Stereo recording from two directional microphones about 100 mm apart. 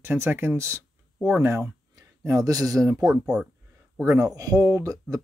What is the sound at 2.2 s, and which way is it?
Speech, 35° right (ahead or behind).